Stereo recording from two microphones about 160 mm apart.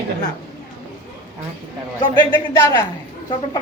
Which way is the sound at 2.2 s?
30° left (ahead or behind).